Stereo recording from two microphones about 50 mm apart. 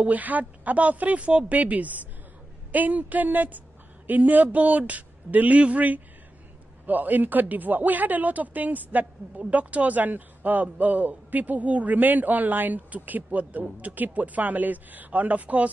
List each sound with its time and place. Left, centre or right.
0.0 s speech: right